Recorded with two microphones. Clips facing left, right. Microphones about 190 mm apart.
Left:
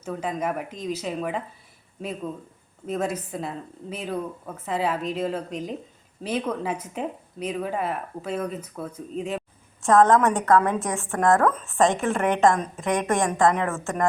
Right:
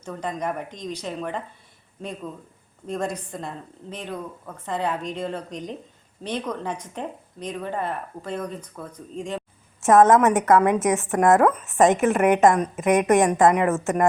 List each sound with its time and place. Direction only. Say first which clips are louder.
0.0 s speech: left 1 dB; 5° left (ahead or behind)
9.8 s a woman's voice: right 2 dB; 20° right (ahead or behind)